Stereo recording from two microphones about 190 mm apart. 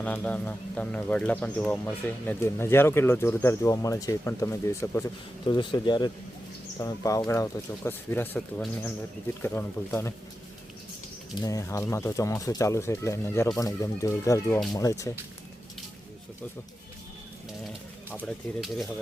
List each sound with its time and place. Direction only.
0.0 s speech: 10° left (ahead or behind)
11.3 s speech: 20° left (ahead or behind)
18.1 s speech: 10° left (ahead or behind)